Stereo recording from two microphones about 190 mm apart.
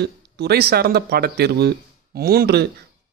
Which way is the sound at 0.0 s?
60° right (ahead or behind).